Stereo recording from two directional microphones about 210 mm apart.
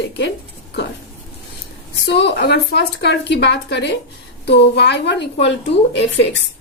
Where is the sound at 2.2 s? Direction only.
55° left (ahead or behind).